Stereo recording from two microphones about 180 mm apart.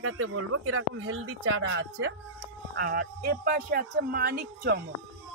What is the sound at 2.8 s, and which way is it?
Speech, 60° right (ahead or behind).